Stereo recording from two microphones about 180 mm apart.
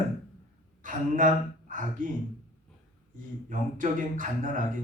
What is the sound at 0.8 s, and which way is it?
A woman's voice, 45° right (ahead or behind).